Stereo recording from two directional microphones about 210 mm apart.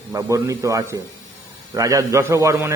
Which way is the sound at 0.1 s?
15° right (ahead or behind).